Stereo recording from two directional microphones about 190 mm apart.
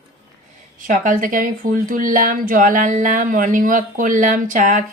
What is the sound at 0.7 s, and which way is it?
Speech, 45° right (ahead or behind).